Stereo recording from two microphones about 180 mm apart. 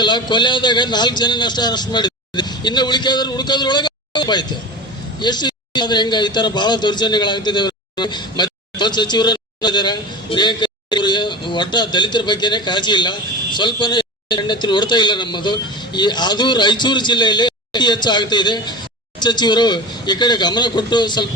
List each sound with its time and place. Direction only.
0.0 s a man's voice: 25° left (ahead or behind)